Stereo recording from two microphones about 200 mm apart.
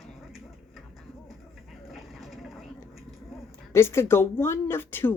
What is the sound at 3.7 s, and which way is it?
Speech, 10° left (ahead or behind).